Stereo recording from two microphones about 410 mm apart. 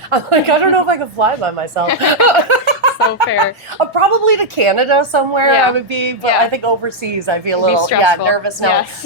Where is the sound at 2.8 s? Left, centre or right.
Right.